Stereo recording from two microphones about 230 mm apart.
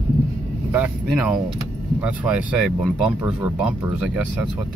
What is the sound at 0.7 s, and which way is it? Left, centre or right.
Speech, centre.